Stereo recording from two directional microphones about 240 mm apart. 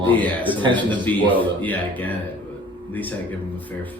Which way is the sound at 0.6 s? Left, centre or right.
Centre.